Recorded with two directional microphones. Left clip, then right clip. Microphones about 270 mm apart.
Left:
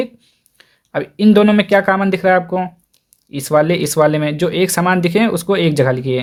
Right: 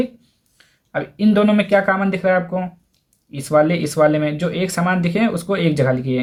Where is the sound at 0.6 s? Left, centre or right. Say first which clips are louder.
Left 3 dB; left.